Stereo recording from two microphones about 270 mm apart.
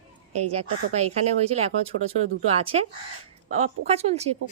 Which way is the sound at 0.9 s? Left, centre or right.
Right.